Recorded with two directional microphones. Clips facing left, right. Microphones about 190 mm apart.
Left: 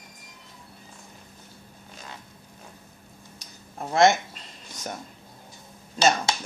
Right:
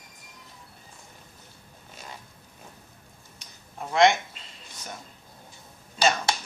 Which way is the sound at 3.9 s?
40° left (ahead or behind).